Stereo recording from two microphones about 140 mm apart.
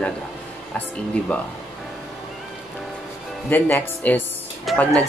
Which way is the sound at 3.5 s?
15° left (ahead or behind).